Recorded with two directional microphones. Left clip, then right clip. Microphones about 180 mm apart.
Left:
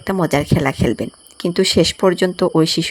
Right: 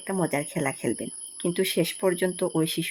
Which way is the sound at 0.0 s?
25° left (ahead or behind).